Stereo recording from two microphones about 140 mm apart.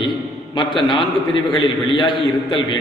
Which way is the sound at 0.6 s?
35° left (ahead or behind).